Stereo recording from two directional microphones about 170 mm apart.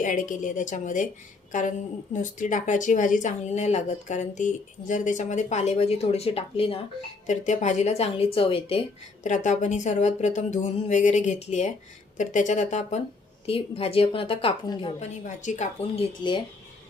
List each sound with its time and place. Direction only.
0.0 s speech: 50° left (ahead or behind)
2.4 s a woman's voice: 50° left (ahead or behind); by 8.8 s 30° left (ahead or behind)
9.2 s a woman's voice: 45° left (ahead or behind)